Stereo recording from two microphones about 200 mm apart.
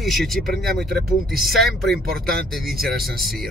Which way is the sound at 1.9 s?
50° right (ahead or behind).